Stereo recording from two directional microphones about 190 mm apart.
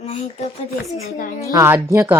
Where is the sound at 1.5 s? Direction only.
15° right (ahead or behind).